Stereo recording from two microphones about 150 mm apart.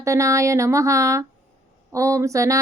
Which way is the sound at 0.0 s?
20° right (ahead or behind).